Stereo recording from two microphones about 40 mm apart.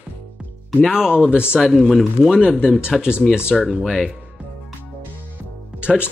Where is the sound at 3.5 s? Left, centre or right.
Centre.